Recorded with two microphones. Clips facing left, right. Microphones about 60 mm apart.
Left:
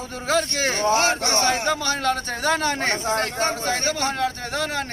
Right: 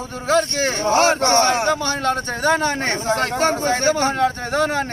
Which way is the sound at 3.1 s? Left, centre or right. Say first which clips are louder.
Right 4 dB; right.